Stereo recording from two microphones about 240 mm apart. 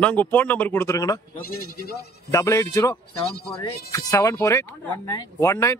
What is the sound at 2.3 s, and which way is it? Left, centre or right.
Speech, centre.